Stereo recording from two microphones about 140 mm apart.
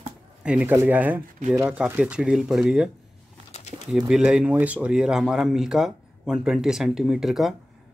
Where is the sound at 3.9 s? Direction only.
5° right (ahead or behind).